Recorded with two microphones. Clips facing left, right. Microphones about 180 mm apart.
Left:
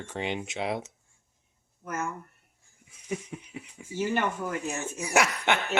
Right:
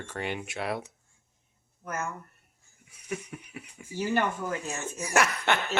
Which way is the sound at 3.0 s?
25° left (ahead or behind).